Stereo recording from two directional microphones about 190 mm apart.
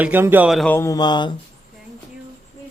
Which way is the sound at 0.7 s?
15° left (ahead or behind).